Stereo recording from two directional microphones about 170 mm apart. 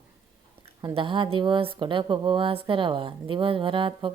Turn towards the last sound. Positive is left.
turn(degrees=-30)  # may be behind; listen again after turning